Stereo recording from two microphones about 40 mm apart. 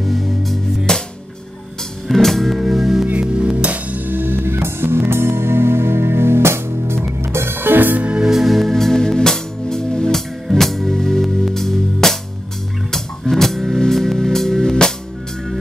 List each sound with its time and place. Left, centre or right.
0.0 s music: centre
0.9 s music: centre
2.0 s music: centre
2.7 s music: centre
3.5 s music: right
8.2 s music: centre
10.5 s music: centre
13.3 s music: centre